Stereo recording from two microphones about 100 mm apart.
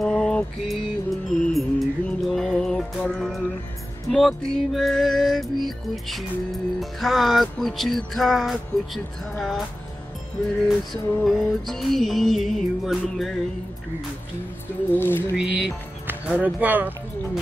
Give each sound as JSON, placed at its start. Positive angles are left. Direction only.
{"t": 0.0, "sound": "music", "side_deg": 5}
{"t": 10.9, "sound": "music", "side_deg": 0}
{"t": 15.0, "sound": "a sound", "side_deg": 20}
{"t": 15.3, "sound": "speech", "side_deg": -10}